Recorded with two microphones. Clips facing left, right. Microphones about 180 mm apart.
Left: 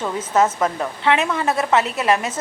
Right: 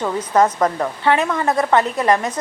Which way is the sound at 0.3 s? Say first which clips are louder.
Right 2 dB; 5° left (ahead or behind).